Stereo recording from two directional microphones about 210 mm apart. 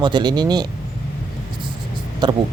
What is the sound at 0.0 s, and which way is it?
Speech, 20° right (ahead or behind).